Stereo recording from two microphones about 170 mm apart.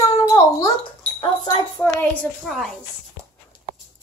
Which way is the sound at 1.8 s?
10° left (ahead or behind).